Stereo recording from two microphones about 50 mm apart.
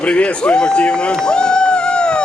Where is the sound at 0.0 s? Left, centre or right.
Left.